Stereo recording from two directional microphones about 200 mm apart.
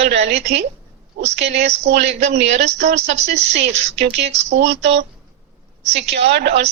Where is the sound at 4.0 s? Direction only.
55° right (ahead or behind).